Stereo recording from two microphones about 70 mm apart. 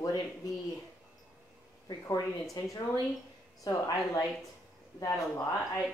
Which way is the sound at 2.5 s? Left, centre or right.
Left.